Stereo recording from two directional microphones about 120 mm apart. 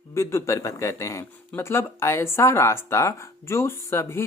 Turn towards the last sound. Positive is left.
turn(degrees=20)  # may be behind; listen again after turning